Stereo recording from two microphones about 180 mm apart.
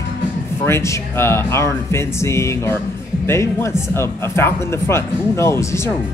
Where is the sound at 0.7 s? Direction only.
15° left (ahead or behind).